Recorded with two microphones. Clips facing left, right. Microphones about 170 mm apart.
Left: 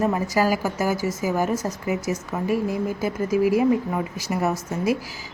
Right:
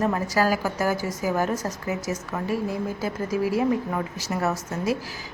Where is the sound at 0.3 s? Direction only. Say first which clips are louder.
Left 1 dB; 10° left (ahead or behind).